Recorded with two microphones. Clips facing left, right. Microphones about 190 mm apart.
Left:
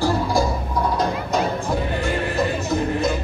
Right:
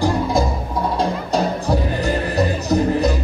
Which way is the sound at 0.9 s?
35° right (ahead or behind).